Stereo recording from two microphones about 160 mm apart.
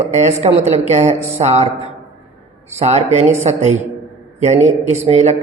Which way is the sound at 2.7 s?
45° right (ahead or behind).